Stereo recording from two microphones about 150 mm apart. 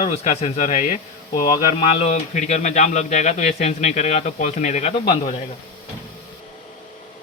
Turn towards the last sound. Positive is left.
turn(degrees=50)  # may be behind; listen again after turning